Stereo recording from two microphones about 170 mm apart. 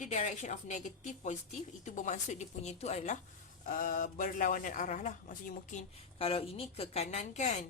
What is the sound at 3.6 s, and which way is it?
A woman's voice, 55° left (ahead or behind).